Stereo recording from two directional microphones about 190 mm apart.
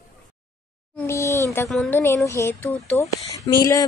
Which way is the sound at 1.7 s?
5° left (ahead or behind).